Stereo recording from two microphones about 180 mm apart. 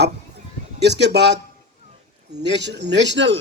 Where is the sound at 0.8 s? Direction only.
70° right (ahead or behind).